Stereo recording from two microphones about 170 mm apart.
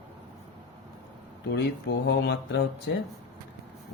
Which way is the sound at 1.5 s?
85° left.